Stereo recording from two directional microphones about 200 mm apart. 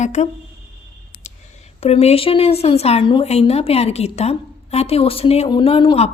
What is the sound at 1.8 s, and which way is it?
Speech, 30° left (ahead or behind).